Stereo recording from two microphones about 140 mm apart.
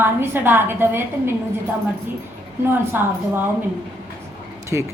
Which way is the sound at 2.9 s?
15° right (ahead or behind).